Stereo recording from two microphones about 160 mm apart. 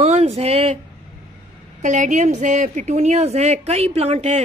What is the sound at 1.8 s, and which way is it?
A woman's voice, 50° right (ahead or behind).